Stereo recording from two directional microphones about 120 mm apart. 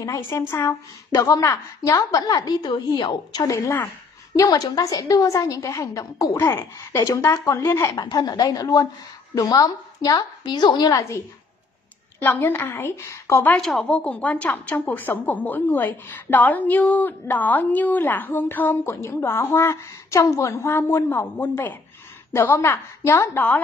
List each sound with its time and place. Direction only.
0.0 s a woman's voice: 25° left (ahead or behind)
8.0 s a woman's voice: 35° left (ahead or behind); by 13.6 s 20° left (ahead or behind)
13.6 s a woman's voice: 5° left (ahead or behind); by 23.4 s 25° left (ahead or behind)